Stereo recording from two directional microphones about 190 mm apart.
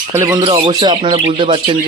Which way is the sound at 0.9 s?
30° right (ahead or behind).